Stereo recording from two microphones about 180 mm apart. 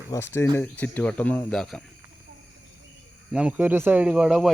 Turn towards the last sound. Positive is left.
turn(degrees=-5)  # may be behind; listen again after turning